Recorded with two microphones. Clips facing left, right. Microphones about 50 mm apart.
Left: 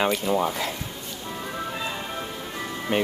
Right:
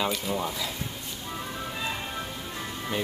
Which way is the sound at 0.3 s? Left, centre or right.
Left.